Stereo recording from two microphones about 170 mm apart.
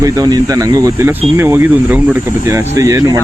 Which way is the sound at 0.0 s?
20° right (ahead or behind).